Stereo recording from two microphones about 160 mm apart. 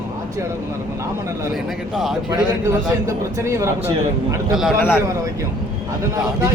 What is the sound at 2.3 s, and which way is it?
A man's voice, 20° right (ahead or behind).